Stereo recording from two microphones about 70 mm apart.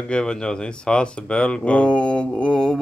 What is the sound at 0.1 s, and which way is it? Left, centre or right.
Speech, centre.